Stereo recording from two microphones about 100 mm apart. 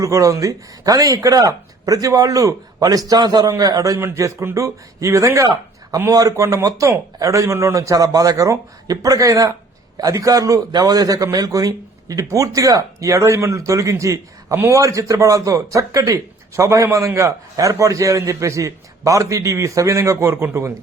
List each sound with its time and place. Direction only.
0.0 s a man's voice: 35° right (ahead or behind)